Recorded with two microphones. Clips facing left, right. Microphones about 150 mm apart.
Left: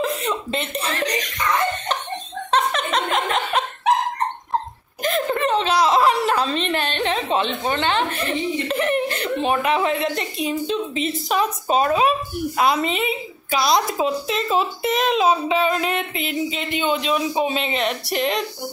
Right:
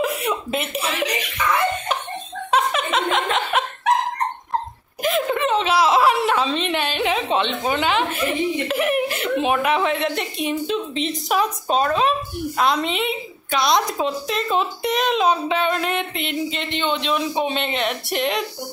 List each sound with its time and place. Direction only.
0.0 s chuckle: 10° right (ahead or behind)
1.2 s laughter: 5° right (ahead or behind)
2.5 s a sound: 5° right (ahead or behind)
5.0 s speech: centre (ahead or behind)